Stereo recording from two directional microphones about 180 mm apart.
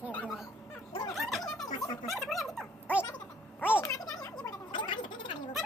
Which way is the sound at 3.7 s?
10° left (ahead or behind).